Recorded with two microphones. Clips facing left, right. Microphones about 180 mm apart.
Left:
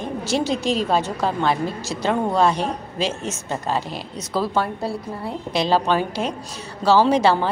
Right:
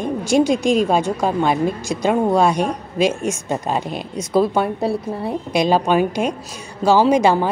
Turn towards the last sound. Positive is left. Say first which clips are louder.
# right 2 dB
turn(degrees=-10)  # may be behind; listen again after turning